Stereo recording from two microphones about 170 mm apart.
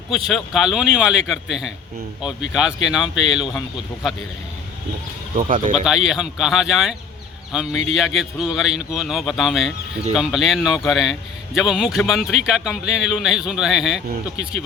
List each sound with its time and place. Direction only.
0.1 s a man's voice: centre (ahead or behind)
5.4 s speech: 50° right (ahead or behind)
5.7 s a man's voice: 5° right (ahead or behind)